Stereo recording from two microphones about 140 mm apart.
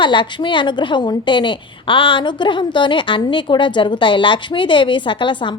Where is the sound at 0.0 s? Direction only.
35° left (ahead or behind).